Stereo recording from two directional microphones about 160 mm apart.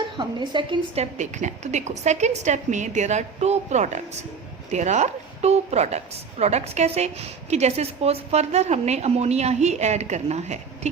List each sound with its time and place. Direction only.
0.2 s a woman's voice: 30° right (ahead or behind)
1.2 s a woman's voice: 50° right (ahead or behind)